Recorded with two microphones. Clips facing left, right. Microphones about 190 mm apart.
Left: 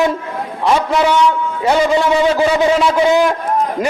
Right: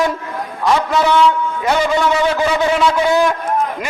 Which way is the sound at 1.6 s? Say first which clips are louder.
Left 4 dB; 30° left (ahead or behind).